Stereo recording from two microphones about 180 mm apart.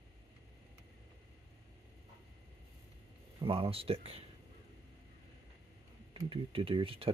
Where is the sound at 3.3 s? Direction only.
30° right (ahead or behind).